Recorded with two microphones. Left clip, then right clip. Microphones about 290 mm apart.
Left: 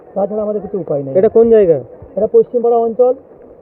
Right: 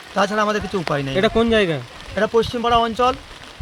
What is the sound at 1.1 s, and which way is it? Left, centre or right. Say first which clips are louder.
Speech: left 9 dB; centre.